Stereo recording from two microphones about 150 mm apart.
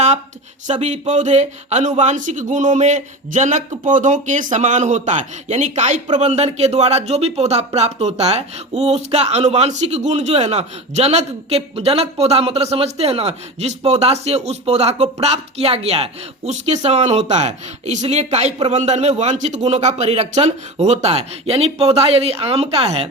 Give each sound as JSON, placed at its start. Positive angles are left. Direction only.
{"t": 0.7, "sound": "a man's voice", "side_deg": -50}